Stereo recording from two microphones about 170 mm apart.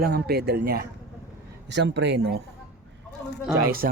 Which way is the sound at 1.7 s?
90° right.